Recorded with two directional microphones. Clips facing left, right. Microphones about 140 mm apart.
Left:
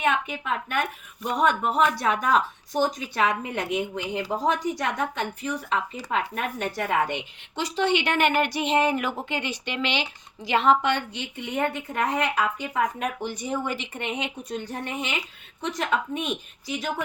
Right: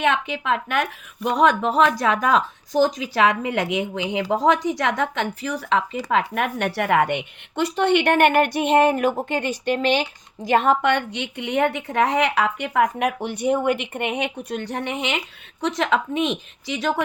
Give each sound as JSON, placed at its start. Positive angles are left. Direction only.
{"t": 0.0, "sound": "speech", "side_deg": -90}
{"t": 15.6, "sound": "speech", "side_deg": -85}